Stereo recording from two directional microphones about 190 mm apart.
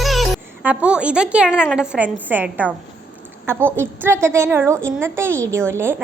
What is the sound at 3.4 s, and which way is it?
A woman's voice, 10° right (ahead or behind).